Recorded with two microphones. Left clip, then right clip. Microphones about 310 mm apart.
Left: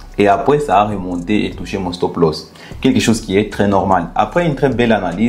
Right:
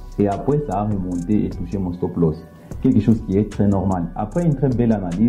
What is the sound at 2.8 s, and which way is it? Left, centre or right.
Speech, centre.